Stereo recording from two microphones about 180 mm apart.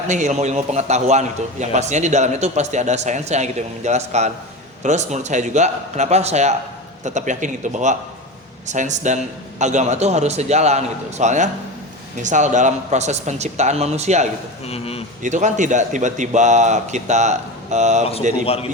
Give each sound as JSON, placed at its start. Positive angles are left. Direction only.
{"t": 0.1, "sound": "a man's voice", "side_deg": -40}
{"t": 14.7, "sound": "speech", "side_deg": 35}
{"t": 15.2, "sound": "a man's voice", "side_deg": -45}